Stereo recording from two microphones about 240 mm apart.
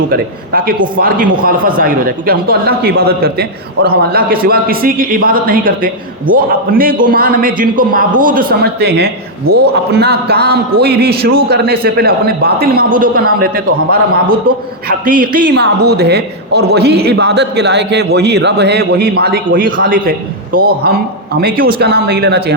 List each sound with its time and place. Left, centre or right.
0.1 s a man's voice: right
15.0 s a man's voice: right